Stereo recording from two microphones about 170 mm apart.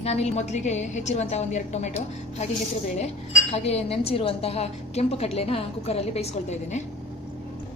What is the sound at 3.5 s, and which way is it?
A woman's voice, 40° left (ahead or behind).